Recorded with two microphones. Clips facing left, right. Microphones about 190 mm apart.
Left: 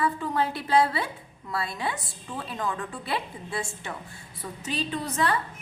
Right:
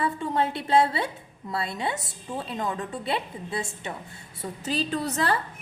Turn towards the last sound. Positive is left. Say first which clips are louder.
# right 1 dB
turn(degrees=-35)  # may be behind; listen again after turning